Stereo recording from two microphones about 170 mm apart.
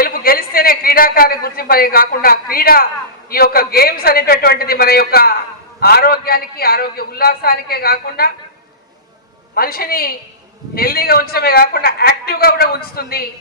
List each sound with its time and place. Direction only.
0.0 s a man's voice: 60° left (ahead or behind)
9.6 s a man's voice: 60° left (ahead or behind)